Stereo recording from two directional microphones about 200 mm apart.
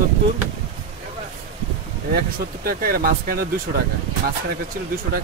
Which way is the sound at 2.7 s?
50° right (ahead or behind).